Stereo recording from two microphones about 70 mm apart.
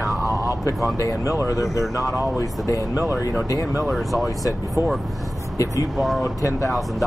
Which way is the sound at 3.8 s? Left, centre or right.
Centre.